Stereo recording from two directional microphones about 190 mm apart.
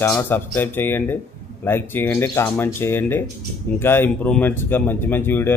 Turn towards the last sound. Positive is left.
turn(degrees=10)  # may be behind; listen again after turning